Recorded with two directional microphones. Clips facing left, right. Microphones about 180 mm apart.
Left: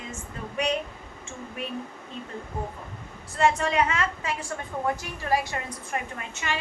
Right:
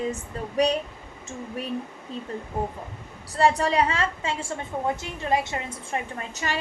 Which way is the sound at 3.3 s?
35° right (ahead or behind).